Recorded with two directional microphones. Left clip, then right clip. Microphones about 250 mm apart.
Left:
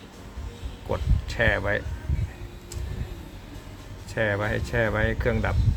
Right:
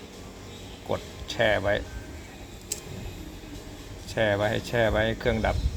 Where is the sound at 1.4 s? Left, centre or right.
Centre.